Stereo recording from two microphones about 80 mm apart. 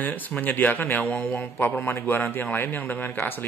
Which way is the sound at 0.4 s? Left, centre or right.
Left.